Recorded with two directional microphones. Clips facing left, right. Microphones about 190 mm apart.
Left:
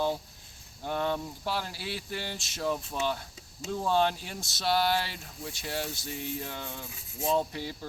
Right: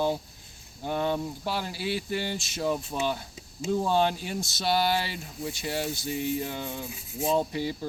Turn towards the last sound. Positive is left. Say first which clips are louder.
# right 3 dB
turn(degrees=-5)  # may be behind; listen again after turning